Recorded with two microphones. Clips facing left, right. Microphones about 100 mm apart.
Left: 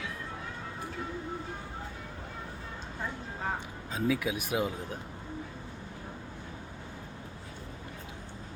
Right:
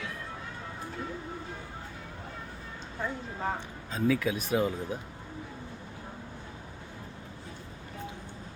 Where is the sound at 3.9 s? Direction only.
10° left (ahead or behind).